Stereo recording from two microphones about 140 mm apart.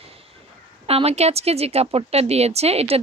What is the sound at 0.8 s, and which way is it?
Speech, 45° right (ahead or behind).